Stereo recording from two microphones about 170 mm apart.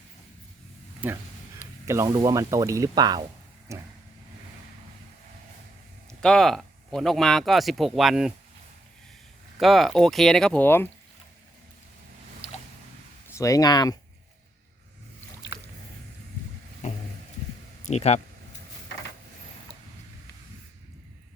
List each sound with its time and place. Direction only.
1.0 s speech: 10° right (ahead or behind)
6.2 s speech: 5° left (ahead or behind)
9.6 s speech: centre (ahead or behind)
13.3 s speech: 20° left (ahead or behind)
17.8 s speech: 40° left (ahead or behind)